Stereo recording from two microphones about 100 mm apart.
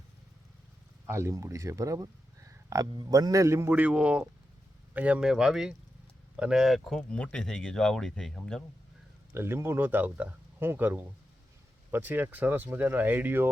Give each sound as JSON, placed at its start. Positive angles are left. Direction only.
{"t": 1.0, "sound": "speech", "side_deg": -25}
{"t": 3.7, "sound": "speech", "side_deg": -15}
{"t": 9.3, "sound": "speech", "side_deg": -25}